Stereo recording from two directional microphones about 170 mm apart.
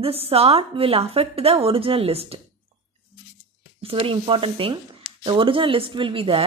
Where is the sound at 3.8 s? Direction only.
35° right (ahead or behind).